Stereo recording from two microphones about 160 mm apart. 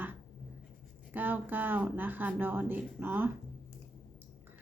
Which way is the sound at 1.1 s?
10° right (ahead or behind).